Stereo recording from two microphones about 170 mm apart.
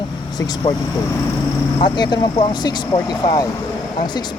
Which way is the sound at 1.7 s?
25° left (ahead or behind).